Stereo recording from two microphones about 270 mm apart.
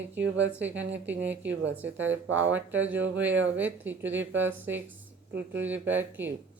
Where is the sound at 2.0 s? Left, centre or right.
Right.